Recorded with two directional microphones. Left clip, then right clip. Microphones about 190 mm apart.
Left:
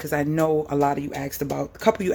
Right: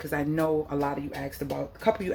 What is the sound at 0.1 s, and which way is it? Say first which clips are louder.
Speech: left 5 dB; 45° left (ahead or behind).